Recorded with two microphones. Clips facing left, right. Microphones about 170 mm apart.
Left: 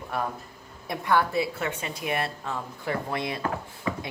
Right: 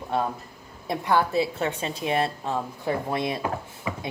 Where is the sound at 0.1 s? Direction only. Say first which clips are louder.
Right 4 dB; 25° right (ahead or behind).